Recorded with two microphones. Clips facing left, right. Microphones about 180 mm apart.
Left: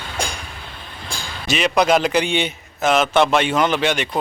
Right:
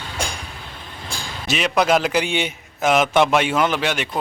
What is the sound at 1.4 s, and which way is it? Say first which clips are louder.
A man's voice: left 2 dB; centre (ahead or behind).